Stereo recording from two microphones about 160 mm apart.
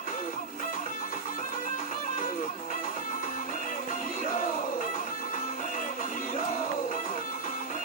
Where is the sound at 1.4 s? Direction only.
55° left (ahead or behind).